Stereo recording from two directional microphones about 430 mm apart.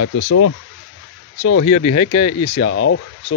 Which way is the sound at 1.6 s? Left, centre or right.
Centre.